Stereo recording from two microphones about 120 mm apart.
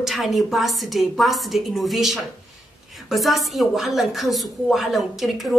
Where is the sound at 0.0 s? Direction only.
Centre (ahead or behind).